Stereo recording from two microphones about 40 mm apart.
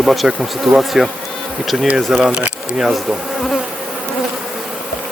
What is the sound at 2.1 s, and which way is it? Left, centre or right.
Speech, centre.